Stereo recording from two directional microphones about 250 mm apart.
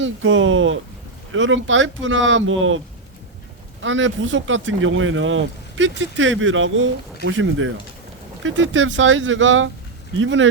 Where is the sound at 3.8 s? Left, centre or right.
Right.